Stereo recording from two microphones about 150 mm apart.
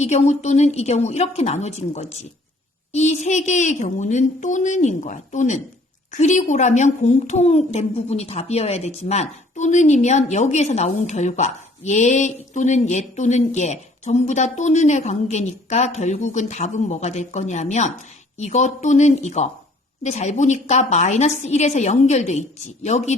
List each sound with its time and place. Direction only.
0.0 s a woman's voice: 50° left (ahead or behind)